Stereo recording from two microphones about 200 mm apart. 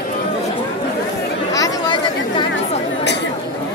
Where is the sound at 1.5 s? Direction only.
15° left (ahead or behind).